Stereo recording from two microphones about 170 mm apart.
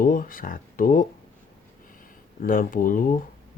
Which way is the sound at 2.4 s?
55° left (ahead or behind).